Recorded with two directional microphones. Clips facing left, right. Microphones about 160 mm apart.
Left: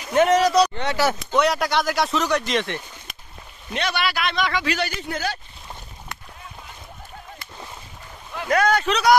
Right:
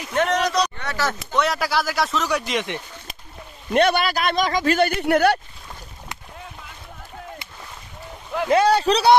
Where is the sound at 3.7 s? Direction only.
50° right (ahead or behind).